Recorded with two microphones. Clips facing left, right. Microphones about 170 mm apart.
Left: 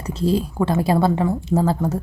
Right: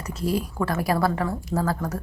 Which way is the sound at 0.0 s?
30° left (ahead or behind).